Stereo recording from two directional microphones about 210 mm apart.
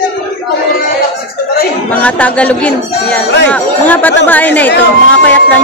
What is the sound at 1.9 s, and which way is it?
Speech, 5° left (ahead or behind).